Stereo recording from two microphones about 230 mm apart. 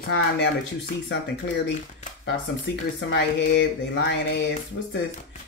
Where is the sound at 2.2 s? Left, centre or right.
Left.